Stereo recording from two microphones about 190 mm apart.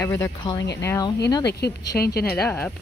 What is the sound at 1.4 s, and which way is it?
Speech, 60° left (ahead or behind).